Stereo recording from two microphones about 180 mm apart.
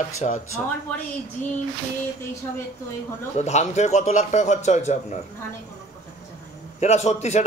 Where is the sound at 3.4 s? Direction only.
40° left (ahead or behind).